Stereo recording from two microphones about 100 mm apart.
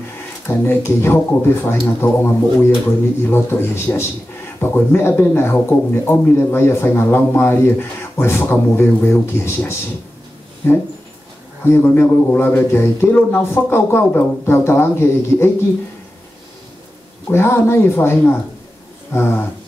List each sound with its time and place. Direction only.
0.5 s speech: 25° left (ahead or behind)
17.3 s speech: 25° left (ahead or behind)